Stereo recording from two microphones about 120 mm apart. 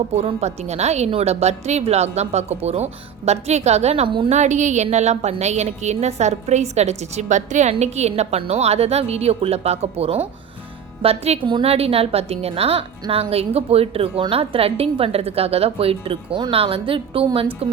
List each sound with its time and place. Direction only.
0.3 s a woman's voice: 60° right (ahead or behind)
4.3 s a woman's voice: 80° right; by 11.3 s 55° right (ahead or behind)
11.4 s a woman's voice: 45° right (ahead or behind)